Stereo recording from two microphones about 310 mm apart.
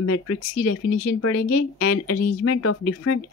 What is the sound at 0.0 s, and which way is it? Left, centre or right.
Speech, left.